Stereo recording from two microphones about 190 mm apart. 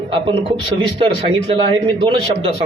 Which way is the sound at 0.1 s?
30° right (ahead or behind).